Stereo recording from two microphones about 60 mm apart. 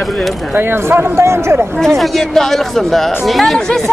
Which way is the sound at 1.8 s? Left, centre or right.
Centre.